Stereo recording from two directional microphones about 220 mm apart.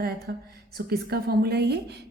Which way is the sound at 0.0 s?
45° right (ahead or behind).